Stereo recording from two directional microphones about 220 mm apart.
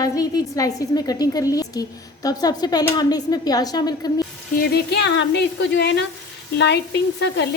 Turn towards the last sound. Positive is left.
turn(degrees=50)  # may be behind; listen again after turning